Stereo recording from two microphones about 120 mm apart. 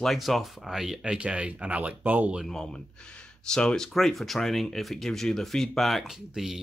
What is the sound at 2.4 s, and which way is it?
Speech, 5° left (ahead or behind).